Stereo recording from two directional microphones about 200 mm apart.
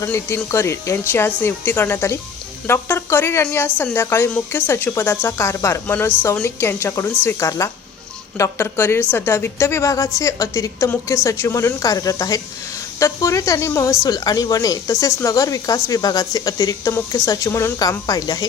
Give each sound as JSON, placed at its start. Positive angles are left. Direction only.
{"t": 0.0, "sound": "speech", "side_deg": 10}